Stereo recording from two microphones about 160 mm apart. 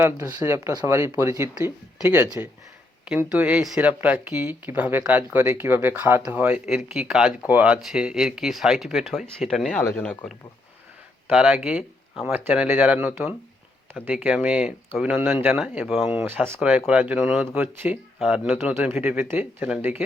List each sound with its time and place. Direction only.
0.0 s speech: 20° right (ahead or behind); by 10.2 s 10° left (ahead or behind)
11.3 s speech: 5° right (ahead or behind)